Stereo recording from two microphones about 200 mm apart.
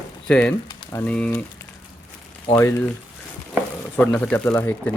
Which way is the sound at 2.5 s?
15° left (ahead or behind).